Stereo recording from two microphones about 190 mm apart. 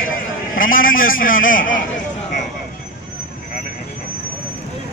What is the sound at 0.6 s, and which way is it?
A man's voice, 45° left (ahead or behind).